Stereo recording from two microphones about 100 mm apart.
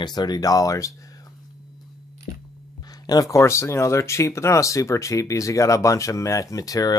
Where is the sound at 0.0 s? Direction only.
45° left (ahead or behind).